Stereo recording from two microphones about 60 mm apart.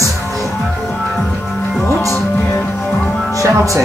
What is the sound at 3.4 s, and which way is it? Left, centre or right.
Speech, right.